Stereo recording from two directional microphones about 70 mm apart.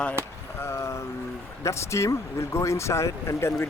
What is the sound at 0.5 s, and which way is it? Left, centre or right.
Vehicle, left.